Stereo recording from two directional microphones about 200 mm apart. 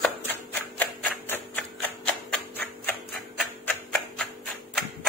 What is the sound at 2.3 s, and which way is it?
Tick-tock, 10° left (ahead or behind).